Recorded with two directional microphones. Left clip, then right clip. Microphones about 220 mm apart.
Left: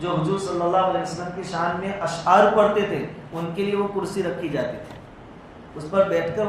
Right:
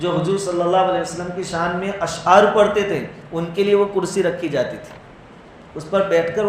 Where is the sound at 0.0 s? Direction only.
50° right (ahead or behind).